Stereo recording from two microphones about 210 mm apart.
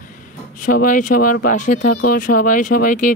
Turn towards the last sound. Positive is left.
turn(degrees=40)  # may be behind; listen again after turning